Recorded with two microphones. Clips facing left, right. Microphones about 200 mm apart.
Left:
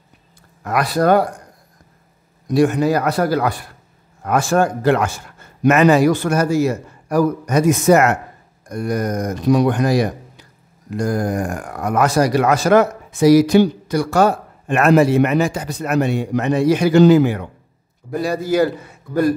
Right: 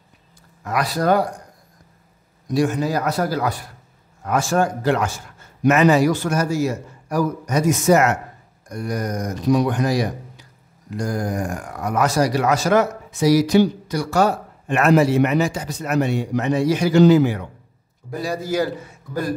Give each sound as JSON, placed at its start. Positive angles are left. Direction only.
{"t": 0.7, "sound": "speech", "side_deg": 60}
{"t": 2.4, "sound": "speech", "side_deg": 60}